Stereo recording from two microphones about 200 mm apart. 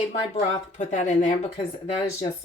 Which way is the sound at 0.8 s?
35° left (ahead or behind).